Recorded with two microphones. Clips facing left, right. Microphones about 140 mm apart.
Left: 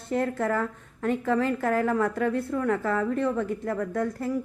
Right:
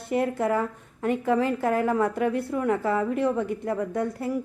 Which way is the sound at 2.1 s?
15° right (ahead or behind).